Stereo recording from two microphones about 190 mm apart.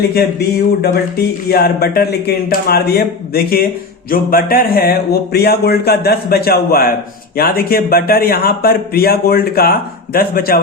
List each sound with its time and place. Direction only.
0.1 s speech: 55° left (ahead or behind)